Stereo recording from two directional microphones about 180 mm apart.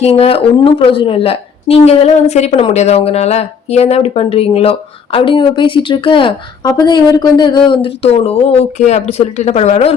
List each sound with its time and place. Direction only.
0.0 s a woman's voice: 35° left (ahead or behind)